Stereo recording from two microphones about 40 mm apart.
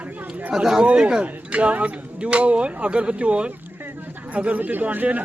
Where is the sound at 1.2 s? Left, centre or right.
Right.